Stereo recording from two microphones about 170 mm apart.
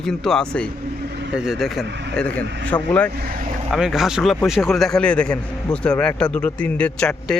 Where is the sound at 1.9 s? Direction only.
90° right.